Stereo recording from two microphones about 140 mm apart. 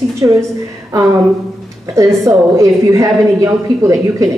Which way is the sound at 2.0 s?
20° right (ahead or behind).